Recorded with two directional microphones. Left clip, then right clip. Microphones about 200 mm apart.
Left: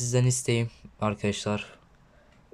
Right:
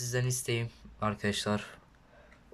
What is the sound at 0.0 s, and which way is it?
Speech, 20° left (ahead or behind).